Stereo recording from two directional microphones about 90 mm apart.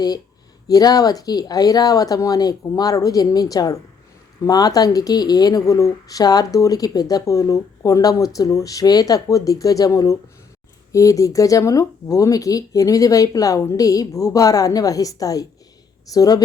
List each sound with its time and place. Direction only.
0.7 s speech: 45° left (ahead or behind)